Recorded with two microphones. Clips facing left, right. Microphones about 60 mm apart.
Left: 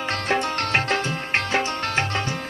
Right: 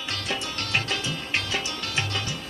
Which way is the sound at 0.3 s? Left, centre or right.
Left.